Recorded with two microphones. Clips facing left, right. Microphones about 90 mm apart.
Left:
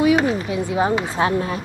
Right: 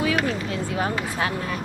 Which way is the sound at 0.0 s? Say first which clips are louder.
Left 7 dB; 20° left (ahead or behind).